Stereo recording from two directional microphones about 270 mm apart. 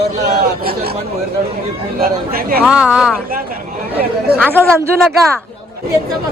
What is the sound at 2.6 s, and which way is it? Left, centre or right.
Speech, centre.